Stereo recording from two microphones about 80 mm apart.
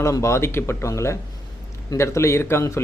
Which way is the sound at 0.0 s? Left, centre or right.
Left.